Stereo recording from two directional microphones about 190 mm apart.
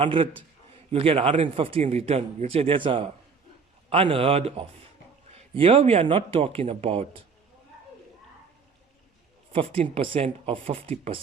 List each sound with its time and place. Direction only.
0.0 s a man's voice: 25° right (ahead or behind)
9.5 s a man's voice: 30° right (ahead or behind)